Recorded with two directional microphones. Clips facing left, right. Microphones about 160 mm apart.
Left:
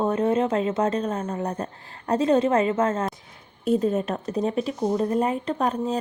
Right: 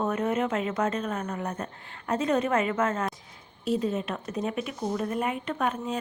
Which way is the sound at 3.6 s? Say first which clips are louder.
Left 5 dB; 50° left (ahead or behind).